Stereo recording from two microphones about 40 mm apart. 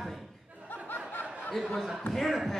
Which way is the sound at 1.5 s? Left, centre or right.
Centre.